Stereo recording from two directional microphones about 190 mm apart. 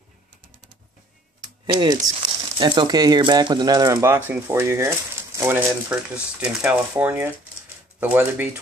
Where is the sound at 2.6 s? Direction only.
25° right (ahead or behind).